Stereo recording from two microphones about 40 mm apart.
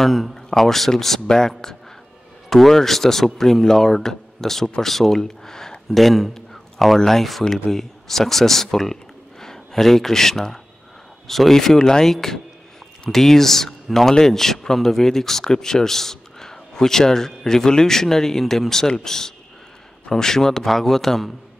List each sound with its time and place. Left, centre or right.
0.0 s speech: centre
2.5 s speech: centre
5.9 s speech: centre
6.3 s a sound: centre
7.1 s speech: centre